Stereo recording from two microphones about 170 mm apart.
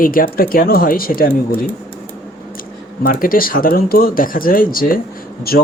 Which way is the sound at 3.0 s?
55° left (ahead or behind).